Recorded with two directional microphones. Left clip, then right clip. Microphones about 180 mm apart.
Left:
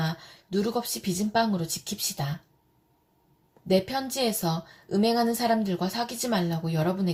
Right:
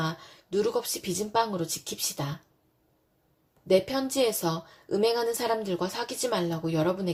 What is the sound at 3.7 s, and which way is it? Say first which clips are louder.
A woman's voice: right 1 dB; 35° right (ahead or behind).